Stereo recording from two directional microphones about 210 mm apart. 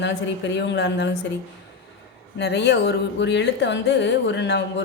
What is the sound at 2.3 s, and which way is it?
Speech, 55° left (ahead or behind).